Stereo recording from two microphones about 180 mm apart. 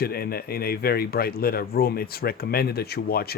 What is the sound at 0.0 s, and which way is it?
Speech, 60° left (ahead or behind).